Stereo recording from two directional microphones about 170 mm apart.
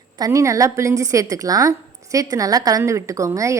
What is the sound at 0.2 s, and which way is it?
A woman's voice, 20° right (ahead or behind).